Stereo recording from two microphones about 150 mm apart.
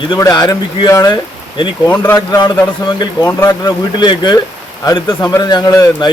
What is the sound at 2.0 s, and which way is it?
Speech, 20° left (ahead or behind).